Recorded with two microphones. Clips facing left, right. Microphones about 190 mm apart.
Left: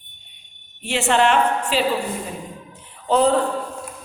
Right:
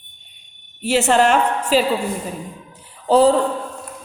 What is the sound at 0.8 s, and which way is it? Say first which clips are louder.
A woman's voice: right 3 dB; 40° right (ahead or behind).